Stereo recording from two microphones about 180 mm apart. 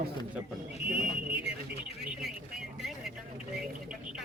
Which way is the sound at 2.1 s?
Centre (ahead or behind).